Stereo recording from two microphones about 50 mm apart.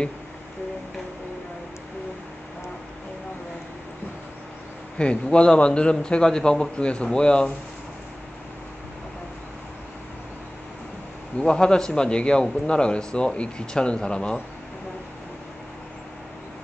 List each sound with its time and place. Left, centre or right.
4.9 s a man's voice: left
11.3 s a man's voice: centre